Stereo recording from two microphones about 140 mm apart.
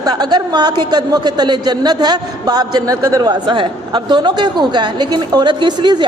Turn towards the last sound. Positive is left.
turn(degrees=-30)  # may be behind; listen again after turning